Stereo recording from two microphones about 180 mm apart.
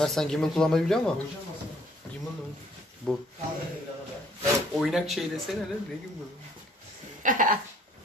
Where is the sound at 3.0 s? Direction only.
5° left (ahead or behind).